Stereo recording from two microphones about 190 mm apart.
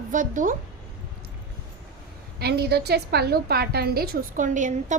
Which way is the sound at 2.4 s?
60° right (ahead or behind).